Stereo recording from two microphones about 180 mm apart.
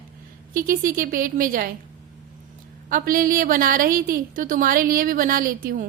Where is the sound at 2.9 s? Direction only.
50° right (ahead or behind).